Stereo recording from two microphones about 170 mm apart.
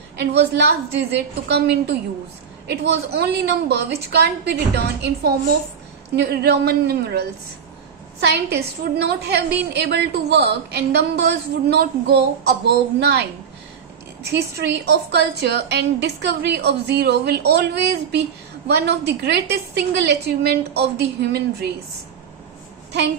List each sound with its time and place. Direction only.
0.2 s a woman's voice: 80° right
14.3 s a woman's voice: 75° right (ahead or behind)